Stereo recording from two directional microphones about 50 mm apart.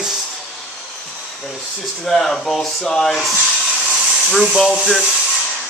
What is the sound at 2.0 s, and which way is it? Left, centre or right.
Speech, centre.